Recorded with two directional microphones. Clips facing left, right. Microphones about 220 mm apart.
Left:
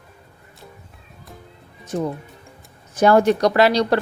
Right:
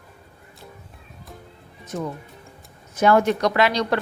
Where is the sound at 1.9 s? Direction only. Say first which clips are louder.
Left 5 dB; 30° left (ahead or behind).